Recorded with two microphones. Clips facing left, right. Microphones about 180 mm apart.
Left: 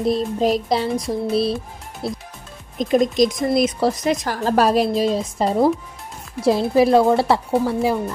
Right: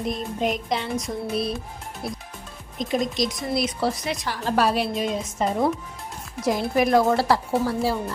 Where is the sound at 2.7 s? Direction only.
50° left (ahead or behind).